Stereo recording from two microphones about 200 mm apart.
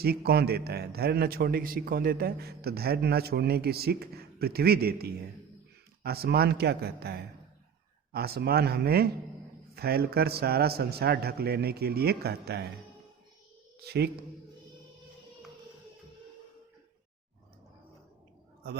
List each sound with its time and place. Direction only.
0.0 s a man's voice: 50° right (ahead or behind)
13.8 s a man's voice: 55° right (ahead or behind)